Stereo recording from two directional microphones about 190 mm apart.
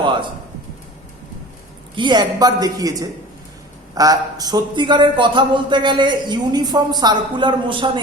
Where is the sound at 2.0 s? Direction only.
25° right (ahead or behind).